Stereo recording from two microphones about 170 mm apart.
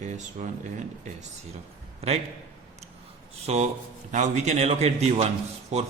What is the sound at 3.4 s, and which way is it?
A man's voice, 40° right (ahead or behind).